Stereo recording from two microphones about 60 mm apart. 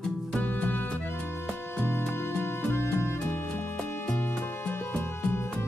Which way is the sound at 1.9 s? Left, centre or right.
Left.